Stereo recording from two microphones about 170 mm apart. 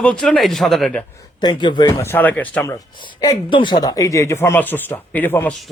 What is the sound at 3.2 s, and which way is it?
Speech, 25° left (ahead or behind).